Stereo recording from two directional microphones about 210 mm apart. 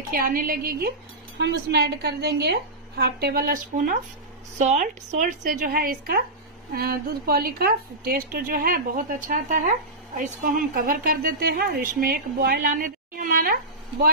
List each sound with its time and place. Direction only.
0.1 s a woman's voice: 45° right (ahead or behind)